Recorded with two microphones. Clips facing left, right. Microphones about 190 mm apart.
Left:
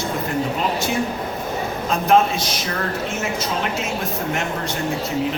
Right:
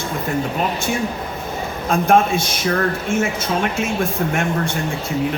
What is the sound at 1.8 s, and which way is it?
Speech, 50° right (ahead or behind).